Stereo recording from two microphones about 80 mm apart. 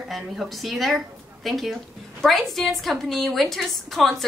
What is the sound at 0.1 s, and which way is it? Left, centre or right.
A woman's voice, centre.